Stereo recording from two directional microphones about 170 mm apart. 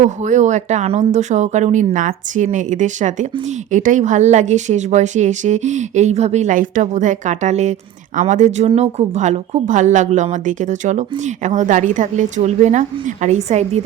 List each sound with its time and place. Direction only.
0.0 s a woman's voice: 45° right (ahead or behind)